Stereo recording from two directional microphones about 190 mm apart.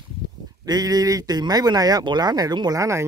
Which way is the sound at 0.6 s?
20° right (ahead or behind).